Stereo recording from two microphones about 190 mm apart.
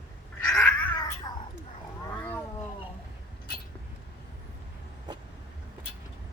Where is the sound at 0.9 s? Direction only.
20° left (ahead or behind).